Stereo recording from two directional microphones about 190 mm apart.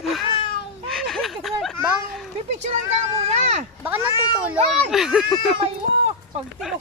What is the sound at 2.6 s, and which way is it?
Speech, 35° right (ahead or behind).